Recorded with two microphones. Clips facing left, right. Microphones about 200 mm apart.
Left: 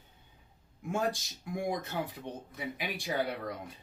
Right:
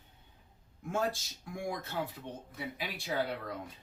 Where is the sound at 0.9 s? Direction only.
15° left (ahead or behind).